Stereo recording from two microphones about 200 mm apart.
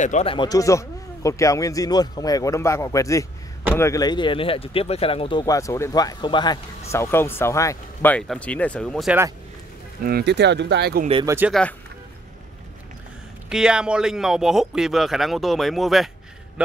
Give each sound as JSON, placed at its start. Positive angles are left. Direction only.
{"t": 0.0, "sound": "speech", "side_deg": 35}
{"t": 10.0, "sound": "speech", "side_deg": -55}
{"t": 11.2, "sound": "speech", "side_deg": -10}
{"t": 13.5, "sound": "speech", "side_deg": -5}